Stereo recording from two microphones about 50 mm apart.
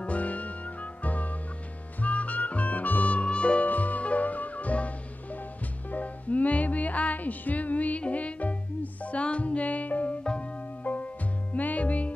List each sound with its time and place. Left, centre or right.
0.0 s music: left
3.6 s music: left
10.2 s music: centre
10.8 s music: left